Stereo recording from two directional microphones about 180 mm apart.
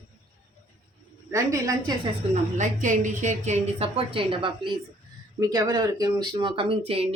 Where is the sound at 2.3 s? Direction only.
45° right (ahead or behind).